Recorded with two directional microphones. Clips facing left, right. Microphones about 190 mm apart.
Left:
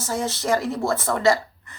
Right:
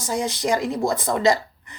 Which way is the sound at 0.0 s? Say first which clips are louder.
Right 2 dB; 15° right (ahead or behind).